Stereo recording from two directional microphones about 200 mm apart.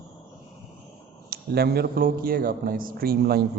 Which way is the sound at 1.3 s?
50° right (ahead or behind).